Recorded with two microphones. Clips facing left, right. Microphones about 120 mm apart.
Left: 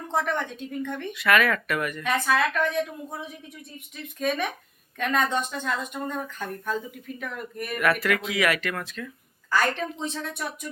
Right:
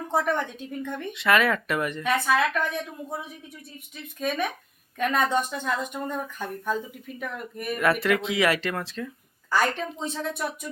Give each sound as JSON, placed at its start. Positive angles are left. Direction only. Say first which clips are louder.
{"t": 0.1, "sound": "speech", "louder": "right 1 dB", "side_deg": -10}
{"t": 1.1, "sound": "speech", "louder": "even", "side_deg": -25}
{"t": 2.0, "sound": "speech", "louder": "right 1 dB", "side_deg": -5}
{"t": 4.2, "sound": "speech", "louder": "left 1 dB", "side_deg": 0}
{"t": 7.8, "sound": "speech", "louder": "right 1 dB", "side_deg": -25}
{"t": 9.5, "sound": "speech", "louder": "even", "side_deg": -10}